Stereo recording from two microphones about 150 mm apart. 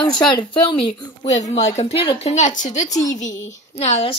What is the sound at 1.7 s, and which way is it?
A woman's voice, 40° left (ahead or behind).